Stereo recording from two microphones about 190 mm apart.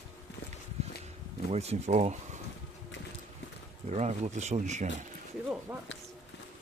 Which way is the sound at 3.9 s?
35° right (ahead or behind).